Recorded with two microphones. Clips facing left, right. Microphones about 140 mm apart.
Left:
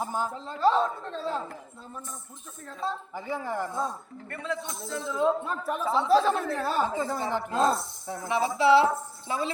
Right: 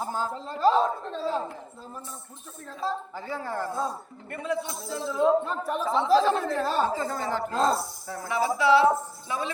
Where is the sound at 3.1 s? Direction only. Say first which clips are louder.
Left 1 dB; 15° left (ahead or behind).